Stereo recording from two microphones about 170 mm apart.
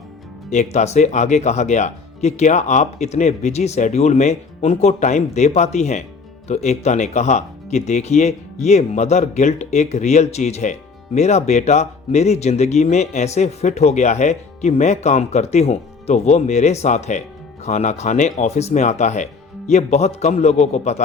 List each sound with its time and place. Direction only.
0.5 s speech: 45° left (ahead or behind)